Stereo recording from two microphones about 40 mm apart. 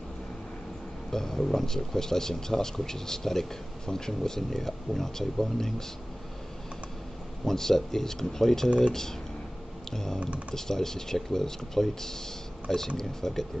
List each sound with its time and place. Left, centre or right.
1.1 s speech: centre
7.4 s speech: centre
9.9 s speech: centre